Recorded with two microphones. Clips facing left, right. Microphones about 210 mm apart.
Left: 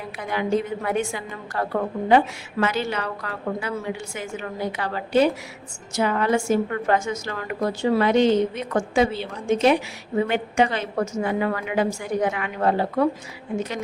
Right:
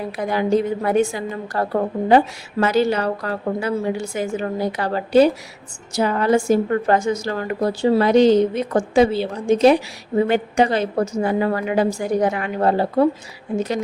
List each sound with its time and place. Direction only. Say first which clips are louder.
0.2 s a woman's voice: right 5 dB; 35° right (ahead or behind)